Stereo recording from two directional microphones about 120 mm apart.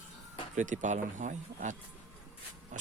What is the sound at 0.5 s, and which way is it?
Speech, 90° right.